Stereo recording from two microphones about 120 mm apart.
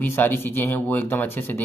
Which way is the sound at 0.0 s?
15° left (ahead or behind).